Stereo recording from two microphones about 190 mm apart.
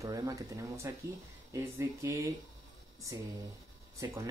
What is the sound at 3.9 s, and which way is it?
Speech, 15° right (ahead or behind).